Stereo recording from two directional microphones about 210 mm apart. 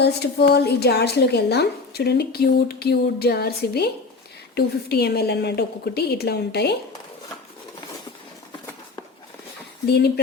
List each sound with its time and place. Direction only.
0.0 s speech: 50° left (ahead or behind)